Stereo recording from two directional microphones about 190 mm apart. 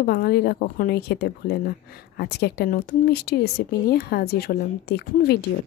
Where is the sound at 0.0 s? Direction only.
55° left (ahead or behind).